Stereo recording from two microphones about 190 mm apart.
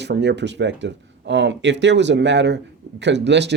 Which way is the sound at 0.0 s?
65° right (ahead or behind).